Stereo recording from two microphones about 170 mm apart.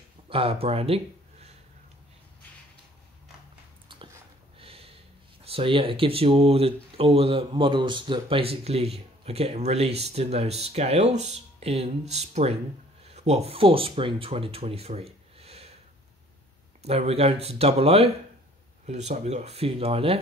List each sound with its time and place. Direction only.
0.3 s speech: 35° right (ahead or behind)
3.9 s dog: 30° right (ahead or behind)
4.6 s a sound: 35° right (ahead or behind)
5.4 s speech: 35° right (ahead or behind)
16.8 s speech: 35° right (ahead or behind)